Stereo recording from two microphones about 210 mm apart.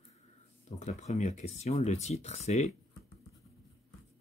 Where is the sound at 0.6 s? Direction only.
35° left (ahead or behind).